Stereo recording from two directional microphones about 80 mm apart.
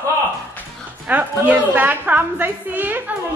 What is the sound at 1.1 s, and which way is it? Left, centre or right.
A woman's voice, right.